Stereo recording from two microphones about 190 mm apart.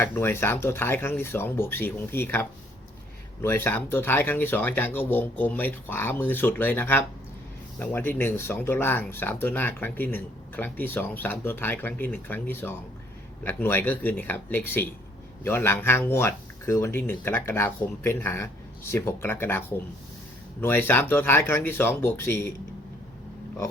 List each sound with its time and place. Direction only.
0.0 s speech: 10° left (ahead or behind)